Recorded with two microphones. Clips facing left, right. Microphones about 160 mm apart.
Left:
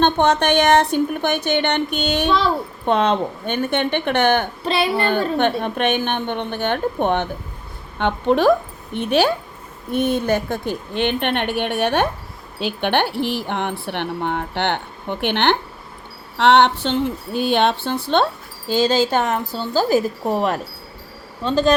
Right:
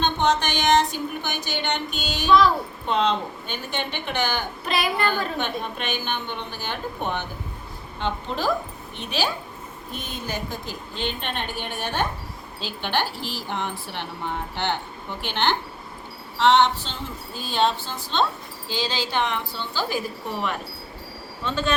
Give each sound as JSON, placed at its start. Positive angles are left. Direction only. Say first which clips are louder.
{"t": 0.0, "sound": "speech", "louder": "left 6 dB", "side_deg": 60}
{"t": 4.6, "sound": "speech", "louder": "left 6 dB", "side_deg": 30}
{"t": 5.4, "sound": "a woman's voice", "louder": "left 9 dB", "side_deg": 60}
{"t": 18.7, "sound": "speech", "louder": "left 10 dB", "side_deg": 45}